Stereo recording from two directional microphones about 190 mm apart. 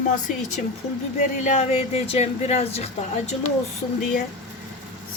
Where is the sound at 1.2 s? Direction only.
40° left (ahead or behind).